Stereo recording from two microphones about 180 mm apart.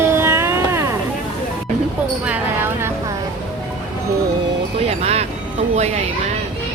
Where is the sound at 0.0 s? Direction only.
15° right (ahead or behind).